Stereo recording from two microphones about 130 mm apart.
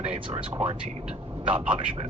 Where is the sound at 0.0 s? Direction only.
50° right (ahead or behind).